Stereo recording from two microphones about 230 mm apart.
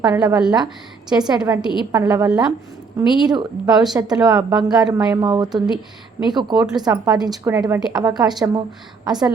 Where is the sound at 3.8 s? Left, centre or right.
Centre.